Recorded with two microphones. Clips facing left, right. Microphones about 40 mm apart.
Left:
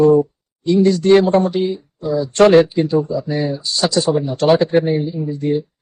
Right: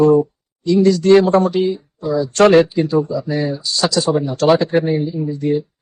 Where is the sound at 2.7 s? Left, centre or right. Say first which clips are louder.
Even; left.